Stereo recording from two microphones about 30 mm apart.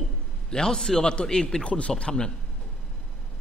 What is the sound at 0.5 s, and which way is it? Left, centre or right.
A man's voice, left.